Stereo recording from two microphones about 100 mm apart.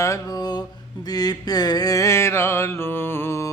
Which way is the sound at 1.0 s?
40° left (ahead or behind).